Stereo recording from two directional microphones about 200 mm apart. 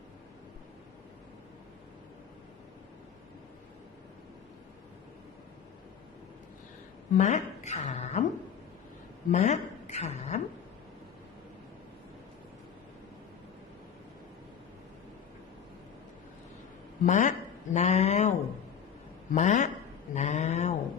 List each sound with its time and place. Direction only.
7.2 s speech: 35° left (ahead or behind)
9.3 s a woman's voice: 35° left (ahead or behind)
17.1 s speech: 40° left (ahead or behind)
20.1 s a sound: 35° left (ahead or behind)